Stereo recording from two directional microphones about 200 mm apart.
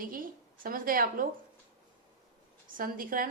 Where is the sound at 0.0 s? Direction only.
45° right (ahead or behind).